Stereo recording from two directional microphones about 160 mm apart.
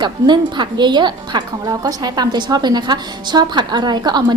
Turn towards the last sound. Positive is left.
turn(degrees=-25)  # may be behind; listen again after turning